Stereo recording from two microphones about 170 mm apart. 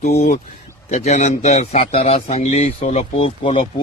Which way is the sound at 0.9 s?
40° left (ahead or behind).